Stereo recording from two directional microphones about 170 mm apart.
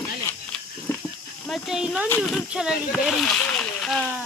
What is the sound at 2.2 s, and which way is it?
Speech, 5° right (ahead or behind).